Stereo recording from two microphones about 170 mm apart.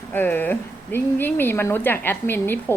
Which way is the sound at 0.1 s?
10° left (ahead or behind).